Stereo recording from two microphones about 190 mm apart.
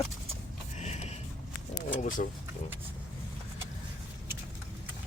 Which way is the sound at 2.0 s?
45° left (ahead or behind).